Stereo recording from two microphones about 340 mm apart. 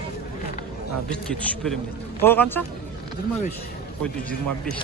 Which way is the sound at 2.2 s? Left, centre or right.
Centre.